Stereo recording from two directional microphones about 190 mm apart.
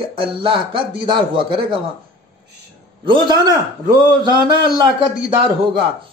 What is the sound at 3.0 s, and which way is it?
Speech, 25° right (ahead or behind).